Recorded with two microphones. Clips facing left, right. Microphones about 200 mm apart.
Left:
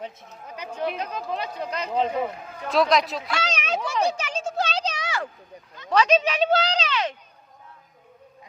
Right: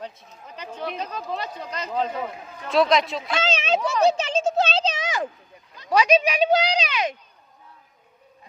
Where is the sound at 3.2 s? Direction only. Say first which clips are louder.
Right 4 dB; 25° right (ahead or behind).